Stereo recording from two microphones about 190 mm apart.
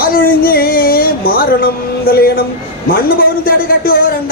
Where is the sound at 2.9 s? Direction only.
50° left (ahead or behind).